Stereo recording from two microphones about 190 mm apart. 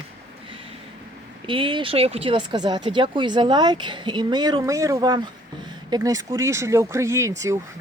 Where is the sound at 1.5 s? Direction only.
25° right (ahead or behind).